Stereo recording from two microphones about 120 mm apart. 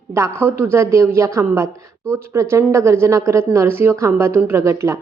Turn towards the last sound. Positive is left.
turn(degrees=-25)  # may be behind; listen again after turning